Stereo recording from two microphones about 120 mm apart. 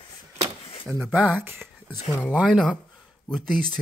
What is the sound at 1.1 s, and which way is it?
Speech, 15° right (ahead or behind).